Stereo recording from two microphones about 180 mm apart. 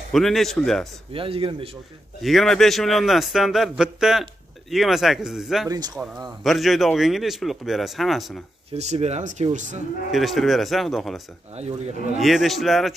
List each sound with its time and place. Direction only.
0.1 s a man's voice: centre (ahead or behind)
1.1 s speech: 30° right (ahead or behind)
2.2 s a man's voice: centre (ahead or behind)
5.7 s speech: 20° right (ahead or behind)
6.4 s a man's voice: centre (ahead or behind)
8.7 s speech: 35° right (ahead or behind)
10.1 s a man's voice: centre (ahead or behind)
11.5 s speech: 40° right (ahead or behind)
12.2 s a man's voice: centre (ahead or behind)